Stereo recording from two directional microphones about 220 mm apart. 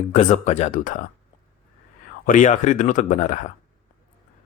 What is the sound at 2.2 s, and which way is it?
Speech, 35° left (ahead or behind).